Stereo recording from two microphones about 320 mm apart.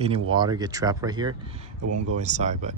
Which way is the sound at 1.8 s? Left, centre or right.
Right.